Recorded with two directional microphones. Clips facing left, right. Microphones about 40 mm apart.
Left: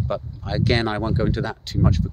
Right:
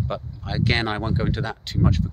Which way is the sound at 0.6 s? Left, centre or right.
Right.